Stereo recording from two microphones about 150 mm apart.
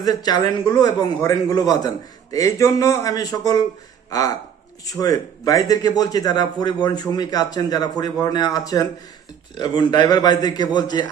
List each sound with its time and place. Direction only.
0.0 s a man's voice: 25° left (ahead or behind)
4.9 s a man's voice: 25° left (ahead or behind)